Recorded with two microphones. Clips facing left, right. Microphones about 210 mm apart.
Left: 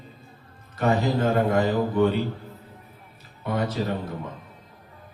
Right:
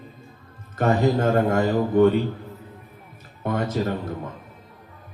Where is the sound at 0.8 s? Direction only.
50° right (ahead or behind).